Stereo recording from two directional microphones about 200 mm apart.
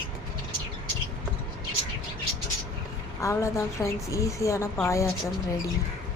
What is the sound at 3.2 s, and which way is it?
A woman's voice, 15° left (ahead or behind).